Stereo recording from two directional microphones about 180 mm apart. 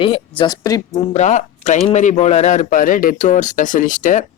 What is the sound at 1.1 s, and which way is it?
Speech, 40° left (ahead or behind).